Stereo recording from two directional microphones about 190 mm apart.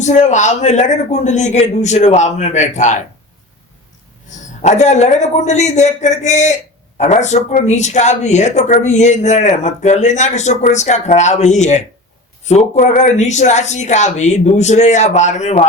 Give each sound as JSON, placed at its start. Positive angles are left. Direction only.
{"t": 0.0, "sound": "speech", "side_deg": 40}
{"t": 4.3, "sound": "speech", "side_deg": 40}